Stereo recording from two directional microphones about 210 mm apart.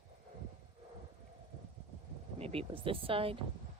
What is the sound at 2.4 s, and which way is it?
Speech, 25° right (ahead or behind).